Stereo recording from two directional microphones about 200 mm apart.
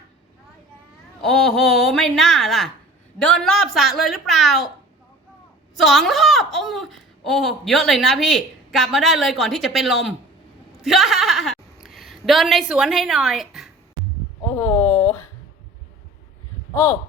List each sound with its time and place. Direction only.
1.2 s a child's voice: centre (ahead or behind)
5.8 s a child's voice: centre (ahead or behind)
14.5 s a sound: 15° left (ahead or behind)
16.7 s speech: 15° left (ahead or behind)